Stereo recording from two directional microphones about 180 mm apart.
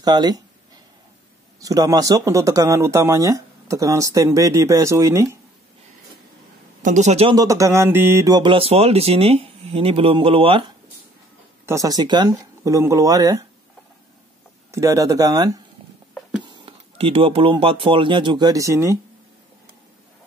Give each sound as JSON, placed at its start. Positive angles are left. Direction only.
{"t": 0.0, "sound": "speech", "side_deg": -20}
{"t": 1.6, "sound": "speech", "side_deg": -20}
{"t": 6.8, "sound": "speech", "side_deg": -40}
{"t": 7.3, "sound": "speech", "side_deg": -20}
{"t": 11.6, "sound": "speech", "side_deg": -20}
{"t": 14.7, "sound": "speech", "side_deg": -15}
{"t": 16.2, "sound": "a sound", "side_deg": -5}
{"t": 16.4, "sound": "speech", "side_deg": -30}